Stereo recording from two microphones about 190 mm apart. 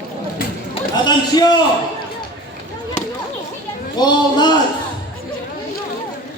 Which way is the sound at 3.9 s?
20° left (ahead or behind).